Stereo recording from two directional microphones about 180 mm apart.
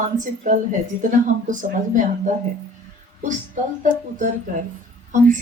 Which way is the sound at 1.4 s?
45° right (ahead or behind).